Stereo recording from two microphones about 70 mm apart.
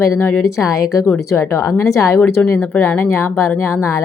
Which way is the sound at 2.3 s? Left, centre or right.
Left.